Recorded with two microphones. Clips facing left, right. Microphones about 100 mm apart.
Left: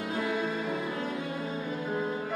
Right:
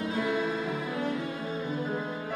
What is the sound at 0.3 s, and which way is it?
Music, 10° right (ahead or behind).